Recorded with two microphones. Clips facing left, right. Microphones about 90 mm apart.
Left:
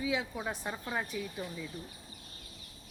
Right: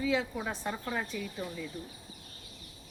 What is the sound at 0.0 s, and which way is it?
Speech, 10° left (ahead or behind).